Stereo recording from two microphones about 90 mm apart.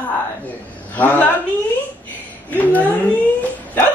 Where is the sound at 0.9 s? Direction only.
20° left (ahead or behind).